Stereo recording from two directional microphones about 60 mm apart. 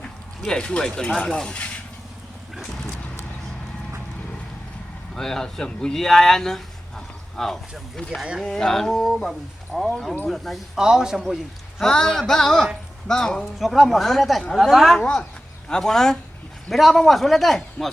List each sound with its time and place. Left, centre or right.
0.4 s speech: centre
5.1 s speech: centre
8.2 s a man's voice: centre
8.4 s a man's voice: centre
10.8 s a man's voice: centre
11.8 s speech: centre
13.4 s a man's voice: centre
15.0 s speech: centre
15.7 s a man's voice: centre